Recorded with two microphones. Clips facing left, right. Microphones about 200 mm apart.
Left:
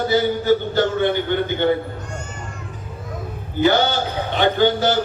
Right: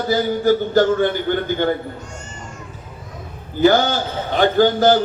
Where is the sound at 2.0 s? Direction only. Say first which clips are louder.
Left 3 dB; 60° left (ahead or behind).